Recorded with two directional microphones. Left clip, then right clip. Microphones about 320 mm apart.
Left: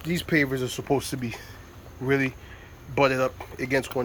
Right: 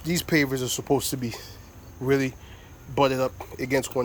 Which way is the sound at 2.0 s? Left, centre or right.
Centre.